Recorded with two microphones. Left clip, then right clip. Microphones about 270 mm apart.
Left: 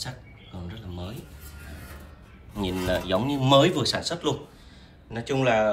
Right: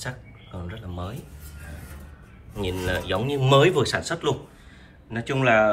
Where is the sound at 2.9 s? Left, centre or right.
Centre.